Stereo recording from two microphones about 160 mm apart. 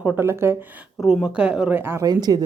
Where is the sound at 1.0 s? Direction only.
5° right (ahead or behind); by 2.4 s 25° right (ahead or behind).